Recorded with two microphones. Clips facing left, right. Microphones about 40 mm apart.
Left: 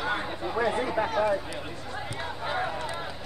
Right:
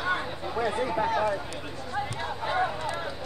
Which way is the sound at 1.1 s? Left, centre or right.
Centre.